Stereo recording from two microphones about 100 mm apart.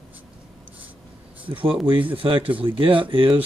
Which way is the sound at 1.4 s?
60° right (ahead or behind).